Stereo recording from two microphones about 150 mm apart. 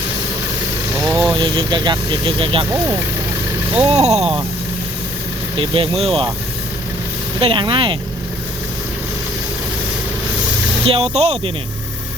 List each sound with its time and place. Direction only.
0.9 s vehicle: 15° right (ahead or behind)
1.4 s speech: 30° right (ahead or behind)
2.6 s speech: 20° right (ahead or behind)
3.9 s speech: 45° right (ahead or behind)
5.5 s speech: 35° right (ahead or behind)
7.3 s speech: 35° right (ahead or behind)
10.8 s speech: 40° right (ahead or behind)